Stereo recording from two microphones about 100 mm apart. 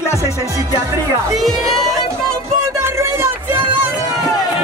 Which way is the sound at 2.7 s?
25° right (ahead or behind).